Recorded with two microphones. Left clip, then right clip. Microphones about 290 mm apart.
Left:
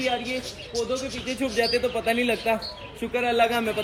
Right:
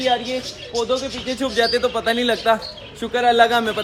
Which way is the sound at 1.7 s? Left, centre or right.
Centre.